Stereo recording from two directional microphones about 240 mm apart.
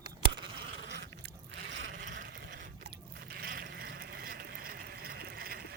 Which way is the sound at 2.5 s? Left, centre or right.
Right.